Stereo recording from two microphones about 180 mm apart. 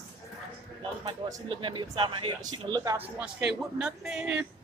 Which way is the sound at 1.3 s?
25° right (ahead or behind).